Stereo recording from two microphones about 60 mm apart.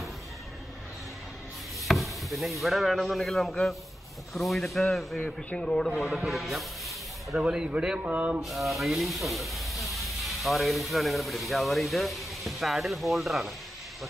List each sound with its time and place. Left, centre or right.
1.9 s speech: centre
5.2 s a man's voice: centre
6.0 s speech: centre
7.3 s speech: centre
8.0 s a sound: right
8.4 s speech: centre